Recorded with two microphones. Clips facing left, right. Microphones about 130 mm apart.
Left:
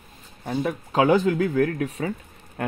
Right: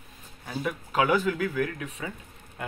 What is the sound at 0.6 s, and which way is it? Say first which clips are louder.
Speech: left 5 dB; 35° left (ahead or behind).